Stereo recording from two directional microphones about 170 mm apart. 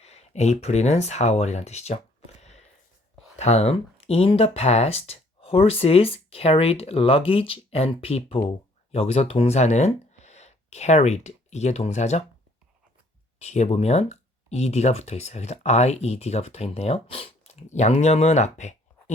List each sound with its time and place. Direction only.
0.0 s speech: 40° left (ahead or behind)
2.4 s a sound: 40° left (ahead or behind)
3.3 s speech: 40° left (ahead or behind)
13.4 s speech: 40° left (ahead or behind)